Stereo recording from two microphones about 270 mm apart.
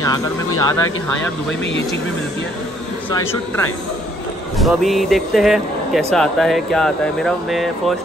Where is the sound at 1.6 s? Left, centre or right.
Left.